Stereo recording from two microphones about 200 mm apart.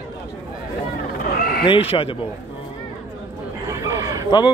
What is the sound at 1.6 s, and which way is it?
Speech, 25° left (ahead or behind).